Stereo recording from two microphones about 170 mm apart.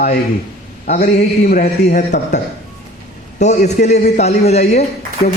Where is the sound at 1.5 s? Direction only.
50° left (ahead or behind).